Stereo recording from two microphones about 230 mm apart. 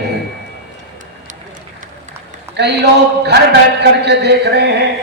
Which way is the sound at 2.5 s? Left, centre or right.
Right.